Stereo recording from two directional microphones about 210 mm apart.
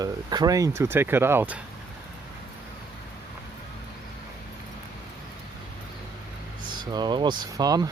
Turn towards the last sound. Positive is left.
turn(degrees=-20)  # may be behind; listen again after turning